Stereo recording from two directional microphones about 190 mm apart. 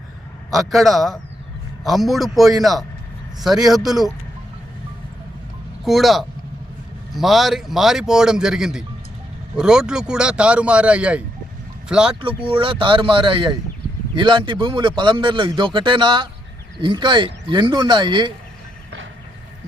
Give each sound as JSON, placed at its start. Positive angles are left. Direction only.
{"t": 0.5, "sound": "a man's voice", "side_deg": 0}
{"t": 5.8, "sound": "a man's voice", "side_deg": 0}
{"t": 12.2, "sound": "a man's voice", "side_deg": -30}